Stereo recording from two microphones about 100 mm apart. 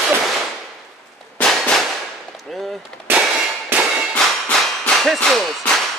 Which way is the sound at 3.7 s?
20° right (ahead or behind).